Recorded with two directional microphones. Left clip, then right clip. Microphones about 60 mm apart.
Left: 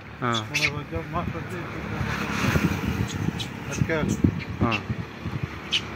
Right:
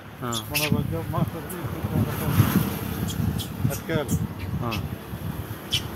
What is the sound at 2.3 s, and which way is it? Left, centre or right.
Boat, left.